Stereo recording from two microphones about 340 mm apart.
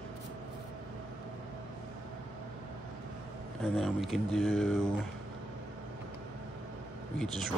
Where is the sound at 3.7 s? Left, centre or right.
Centre.